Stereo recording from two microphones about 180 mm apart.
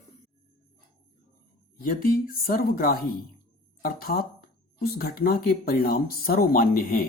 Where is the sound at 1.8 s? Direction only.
50° left (ahead or behind).